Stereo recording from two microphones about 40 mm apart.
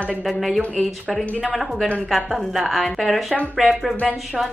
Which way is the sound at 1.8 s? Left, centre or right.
Left.